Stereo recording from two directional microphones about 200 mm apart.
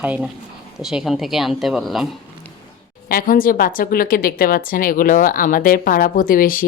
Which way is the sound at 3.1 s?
45° left (ahead or behind).